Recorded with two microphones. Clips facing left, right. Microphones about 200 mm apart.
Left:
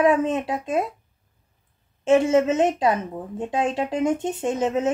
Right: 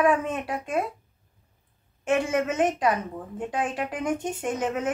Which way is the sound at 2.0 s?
25° left (ahead or behind).